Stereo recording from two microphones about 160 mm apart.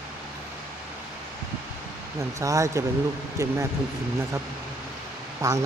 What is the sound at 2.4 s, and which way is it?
Speech, 20° right (ahead or behind).